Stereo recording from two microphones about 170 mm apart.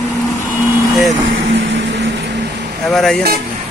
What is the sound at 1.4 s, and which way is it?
Vehicle, 90° right.